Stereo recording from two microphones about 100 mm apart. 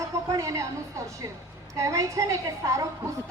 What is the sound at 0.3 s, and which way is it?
A woman's voice, 30° right (ahead or behind).